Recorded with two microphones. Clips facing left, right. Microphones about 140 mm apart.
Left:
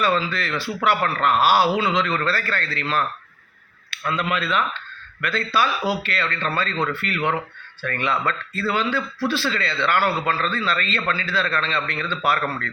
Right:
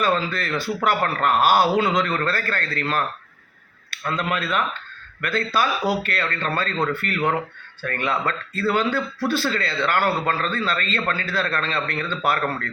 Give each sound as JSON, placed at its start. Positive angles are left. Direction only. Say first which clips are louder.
{"t": 0.0, "sound": "a man's voice", "louder": "even", "side_deg": -45}